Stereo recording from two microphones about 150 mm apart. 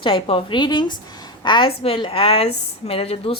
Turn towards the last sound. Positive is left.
turn(degrees=40)  # may be behind; listen again after turning